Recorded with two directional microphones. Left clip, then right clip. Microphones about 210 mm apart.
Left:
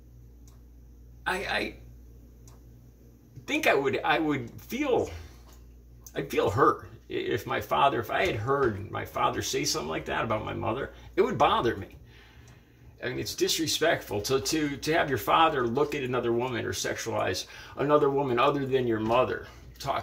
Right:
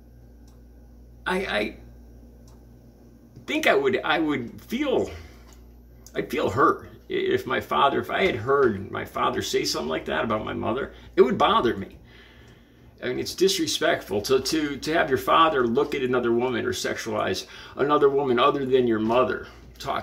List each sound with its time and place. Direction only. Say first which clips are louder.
1.2 s speech: right 4 dB; centre (ahead or behind)
3.4 s speech: right 4 dB; 5° right (ahead or behind)
6.1 s speech: right 2 dB; centre (ahead or behind)
13.0 s speech: right 6 dB; 5° right (ahead or behind)